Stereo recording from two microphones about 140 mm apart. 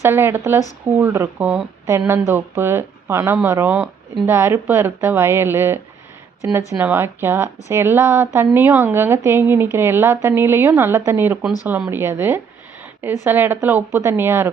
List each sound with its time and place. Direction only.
0.0 s speech: 15° right (ahead or behind)